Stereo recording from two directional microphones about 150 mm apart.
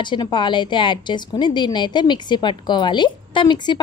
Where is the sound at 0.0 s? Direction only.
30° left (ahead or behind).